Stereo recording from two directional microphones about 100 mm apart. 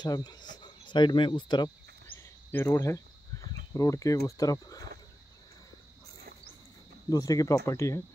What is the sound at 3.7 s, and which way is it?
Speech, 35° left (ahead or behind).